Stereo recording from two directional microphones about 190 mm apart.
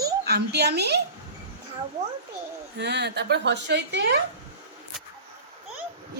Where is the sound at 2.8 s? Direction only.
65° right (ahead or behind).